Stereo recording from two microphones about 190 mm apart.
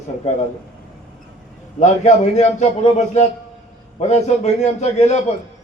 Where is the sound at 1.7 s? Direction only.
35° left (ahead or behind).